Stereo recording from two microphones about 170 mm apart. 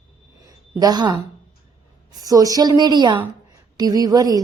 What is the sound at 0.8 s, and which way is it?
Speech, 25° right (ahead or behind).